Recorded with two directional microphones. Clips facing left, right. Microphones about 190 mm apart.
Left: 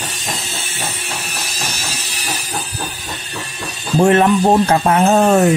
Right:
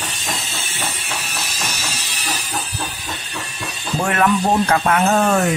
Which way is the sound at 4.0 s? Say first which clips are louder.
Left 6 dB; 30° left (ahead or behind).